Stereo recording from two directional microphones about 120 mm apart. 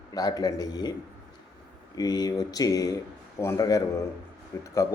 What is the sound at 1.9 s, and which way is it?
A man's voice, 35° left (ahead or behind).